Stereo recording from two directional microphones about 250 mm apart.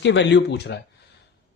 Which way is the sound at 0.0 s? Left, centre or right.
Left.